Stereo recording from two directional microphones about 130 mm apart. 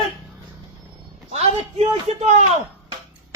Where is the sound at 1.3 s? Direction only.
55° right (ahead or behind).